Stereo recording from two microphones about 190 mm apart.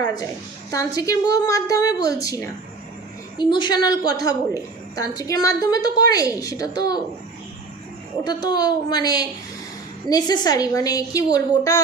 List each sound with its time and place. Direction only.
0.0 s a woman's voice: 20° left (ahead or behind)
3.3 s a woman's voice: 25° left (ahead or behind)
8.2 s a woman's voice: 20° left (ahead or behind)